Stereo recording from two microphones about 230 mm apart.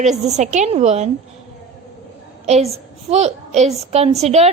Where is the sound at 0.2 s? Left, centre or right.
Right.